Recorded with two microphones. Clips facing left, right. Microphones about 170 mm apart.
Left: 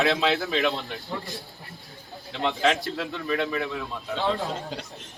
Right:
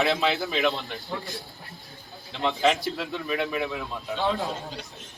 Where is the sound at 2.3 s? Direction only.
Centre (ahead or behind).